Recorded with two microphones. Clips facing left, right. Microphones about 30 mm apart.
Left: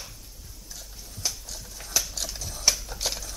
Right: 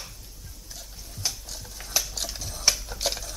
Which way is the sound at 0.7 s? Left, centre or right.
Centre.